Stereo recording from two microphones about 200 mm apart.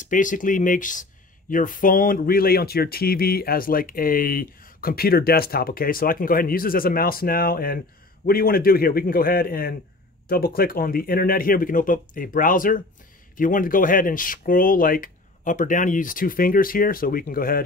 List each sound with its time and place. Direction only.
0.0 s speech: 40° left (ahead or behind)